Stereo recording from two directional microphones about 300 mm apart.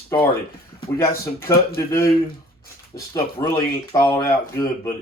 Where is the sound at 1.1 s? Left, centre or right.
Left.